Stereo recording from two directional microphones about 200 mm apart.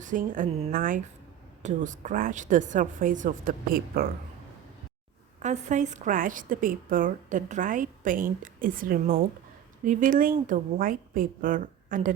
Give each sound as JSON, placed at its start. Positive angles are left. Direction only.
{"t": 0.0, "sound": "a woman's voice", "side_deg": -40}
{"t": 5.4, "sound": "a woman's voice", "side_deg": -35}